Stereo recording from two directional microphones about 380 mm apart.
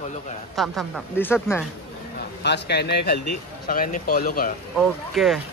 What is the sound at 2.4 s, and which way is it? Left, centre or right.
A woman's voice, left.